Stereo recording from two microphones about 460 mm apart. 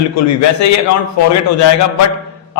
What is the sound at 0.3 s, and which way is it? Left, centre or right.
A man's voice, left.